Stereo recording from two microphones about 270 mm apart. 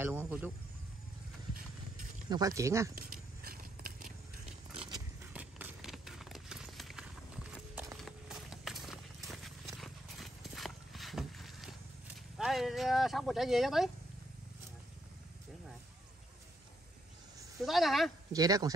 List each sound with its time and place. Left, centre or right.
0.0 s a man's voice: centre
2.2 s speech: centre
3.0 s a sound: right
4.7 s a sound: centre
5.3 s a sound: centre
7.7 s clip-clop: centre
12.4 s speech: centre
17.6 s speech: centre
18.3 s speech: centre